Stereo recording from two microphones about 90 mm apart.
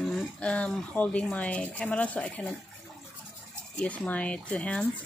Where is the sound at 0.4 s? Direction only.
15° left (ahead or behind).